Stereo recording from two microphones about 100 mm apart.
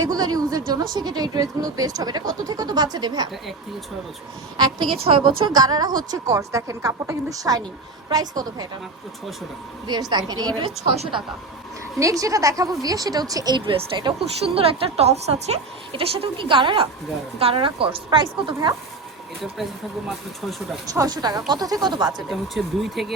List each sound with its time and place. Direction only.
0.0 s a woman's voice: 40° right (ahead or behind)
4.5 s a woman's voice: 50° right (ahead or behind)
9.8 s a woman's voice: 45° right (ahead or behind)
10.8 s a woman's voice: 90° right
11.9 s a woman's voice: 35° right (ahead or behind)
13.7 s a woman's voice: 55° right (ahead or behind)
14.5 s a woman's voice: 70° right (ahead or behind); by 18.7 s 55° right (ahead or behind)
20.1 s speech: centre (ahead or behind)
20.8 s a woman's voice: 40° right (ahead or behind)
22.3 s speech: centre (ahead or behind)